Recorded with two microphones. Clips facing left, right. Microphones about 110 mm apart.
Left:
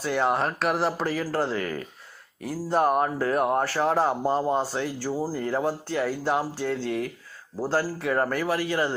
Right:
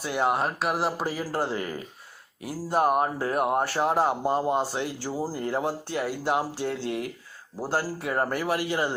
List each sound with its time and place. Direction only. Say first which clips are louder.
0.1 s speech: left 1 dB; 15° right (ahead or behind)